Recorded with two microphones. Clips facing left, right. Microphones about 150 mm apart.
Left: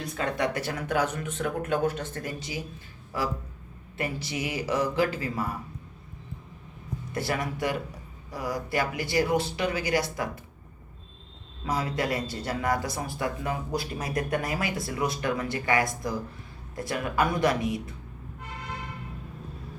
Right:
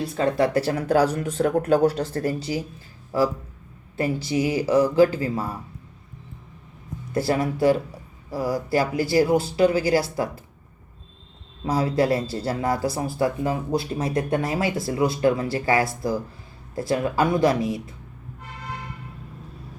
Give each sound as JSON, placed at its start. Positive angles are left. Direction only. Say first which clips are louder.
{"t": 0.0, "sound": "speech", "louder": "right 7 dB", "side_deg": -30}
{"t": 3.9, "sound": "speech", "louder": "right 8 dB", "side_deg": -30}
{"t": 7.1, "sound": "speech", "louder": "right 8 dB", "side_deg": -25}
{"t": 11.6, "sound": "speech", "louder": "right 7 dB", "side_deg": -30}